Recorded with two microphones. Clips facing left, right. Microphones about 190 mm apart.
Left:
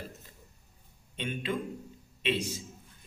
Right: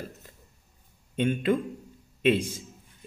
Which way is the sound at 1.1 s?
50° right (ahead or behind).